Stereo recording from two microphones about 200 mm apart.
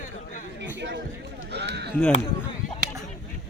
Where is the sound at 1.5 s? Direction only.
55° right (ahead or behind).